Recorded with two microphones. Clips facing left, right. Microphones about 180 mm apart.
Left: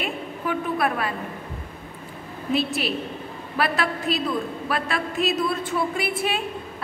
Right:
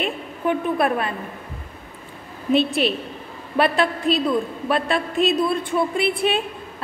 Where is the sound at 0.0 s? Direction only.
25° right (ahead or behind).